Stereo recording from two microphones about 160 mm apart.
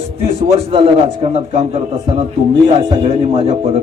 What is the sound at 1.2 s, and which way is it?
A man's voice, 40° right (ahead or behind).